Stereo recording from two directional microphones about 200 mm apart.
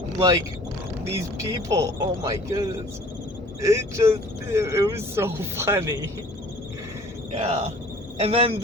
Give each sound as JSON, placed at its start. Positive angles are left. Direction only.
{"t": 1.0, "sound": "speech", "side_deg": -15}
{"t": 7.3, "sound": "cricket", "side_deg": -30}
{"t": 8.2, "sound": "a man's voice", "side_deg": -30}